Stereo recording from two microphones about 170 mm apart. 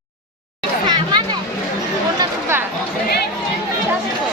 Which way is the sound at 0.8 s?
25° right (ahead or behind).